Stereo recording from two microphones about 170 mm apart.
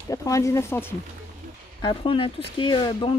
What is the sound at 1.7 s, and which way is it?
Speech, 30° left (ahead or behind).